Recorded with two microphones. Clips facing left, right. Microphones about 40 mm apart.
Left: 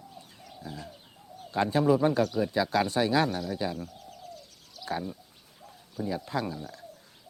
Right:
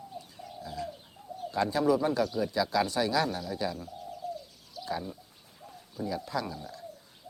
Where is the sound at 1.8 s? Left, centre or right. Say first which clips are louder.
Left 3 dB; left.